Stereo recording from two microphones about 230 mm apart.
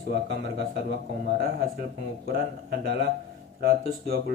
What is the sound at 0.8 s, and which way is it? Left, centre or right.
Speech, right.